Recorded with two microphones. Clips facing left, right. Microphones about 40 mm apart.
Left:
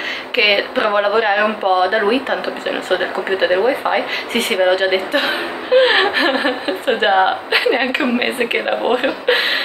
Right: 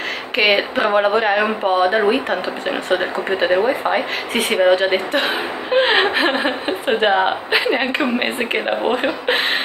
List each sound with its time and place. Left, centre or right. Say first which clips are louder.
0.4 s speech: left 1 dB; centre